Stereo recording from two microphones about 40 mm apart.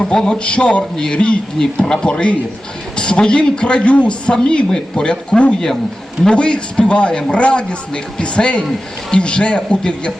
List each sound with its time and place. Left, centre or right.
0.0 s speech: centre
0.4 s speech: left
1.5 s speech: centre
6.3 s speech: left